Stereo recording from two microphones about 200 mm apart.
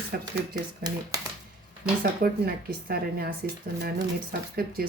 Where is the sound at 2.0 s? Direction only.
50° right (ahead or behind).